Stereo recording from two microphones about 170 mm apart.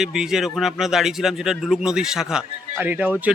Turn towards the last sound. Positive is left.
turn(degrees=-10)  # may be behind; listen again after turning